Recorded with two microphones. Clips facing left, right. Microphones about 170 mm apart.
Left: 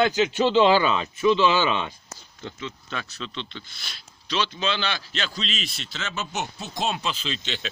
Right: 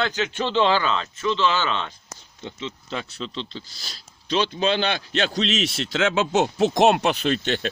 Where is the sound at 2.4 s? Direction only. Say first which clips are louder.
Right 2 dB; 25° right (ahead or behind).